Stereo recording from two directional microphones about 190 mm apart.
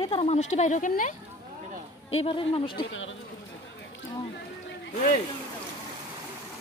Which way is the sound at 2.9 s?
85° left.